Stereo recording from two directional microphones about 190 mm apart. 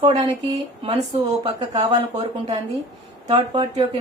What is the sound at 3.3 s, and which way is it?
Speech, 25° right (ahead or behind).